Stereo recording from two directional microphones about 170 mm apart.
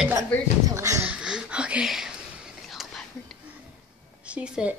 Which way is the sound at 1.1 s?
5° right (ahead or behind).